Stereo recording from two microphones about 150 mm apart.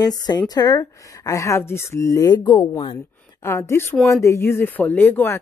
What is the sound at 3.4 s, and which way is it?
Speech, 15° left (ahead or behind).